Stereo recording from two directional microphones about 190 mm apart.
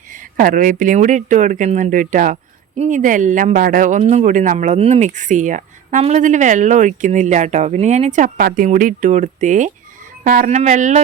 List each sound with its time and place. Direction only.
0.1 s speech: 45° right (ahead or behind)